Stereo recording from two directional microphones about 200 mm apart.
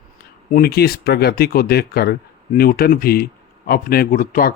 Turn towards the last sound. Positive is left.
turn(degrees=45)  # may be behind; listen again after turning